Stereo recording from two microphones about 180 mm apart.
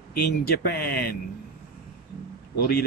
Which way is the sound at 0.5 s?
60° left (ahead or behind).